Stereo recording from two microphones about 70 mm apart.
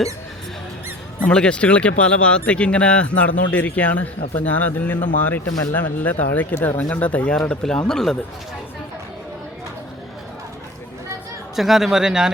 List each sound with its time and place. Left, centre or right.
1.2 s speech: centre
11.5 s speech: centre